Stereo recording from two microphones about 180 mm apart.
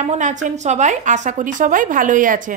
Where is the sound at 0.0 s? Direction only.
40° right (ahead or behind).